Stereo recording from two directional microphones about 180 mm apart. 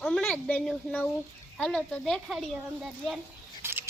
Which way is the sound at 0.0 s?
Centre (ahead or behind).